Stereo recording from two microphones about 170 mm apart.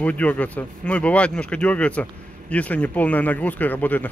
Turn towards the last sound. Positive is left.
turn(degrees=10)  # may be behind; listen again after turning